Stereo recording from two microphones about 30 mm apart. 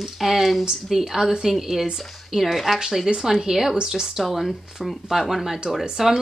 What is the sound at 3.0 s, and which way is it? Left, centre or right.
Speech, centre.